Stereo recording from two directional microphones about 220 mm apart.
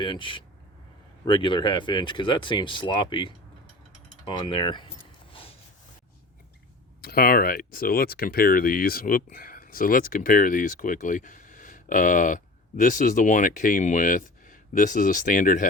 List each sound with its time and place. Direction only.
0.0 s speech: 20° left (ahead or behind)
4.3 s a sound: 20° left (ahead or behind)
7.0 s speech: 45° left (ahead or behind)